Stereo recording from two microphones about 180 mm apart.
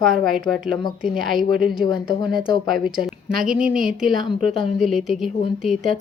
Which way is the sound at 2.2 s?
25° left (ahead or behind).